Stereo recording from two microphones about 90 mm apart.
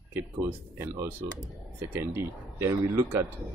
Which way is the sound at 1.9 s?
30° right (ahead or behind).